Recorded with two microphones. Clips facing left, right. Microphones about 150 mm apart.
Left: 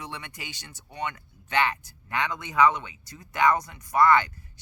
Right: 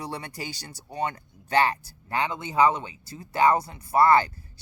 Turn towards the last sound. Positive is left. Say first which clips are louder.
# right 1 dB
turn(degrees=-35)  # may be behind; listen again after turning